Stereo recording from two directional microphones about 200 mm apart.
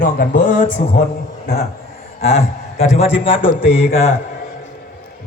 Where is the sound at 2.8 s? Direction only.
30° left (ahead or behind).